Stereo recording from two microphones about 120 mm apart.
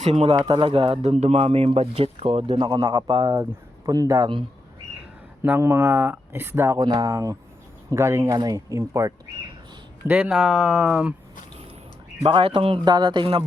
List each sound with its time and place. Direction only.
0.0 s speech: 60° right (ahead or behind)
1.1 s speech: 65° right (ahead or behind)
2.5 s speech: 35° right (ahead or behind)
5.4 s speech: 20° right (ahead or behind)
6.7 s speech: 35° right (ahead or behind)
7.1 s speech: 25° right (ahead or behind)
10.1 s speech: 10° right (ahead or behind)
12.2 s speech: 50° right (ahead or behind)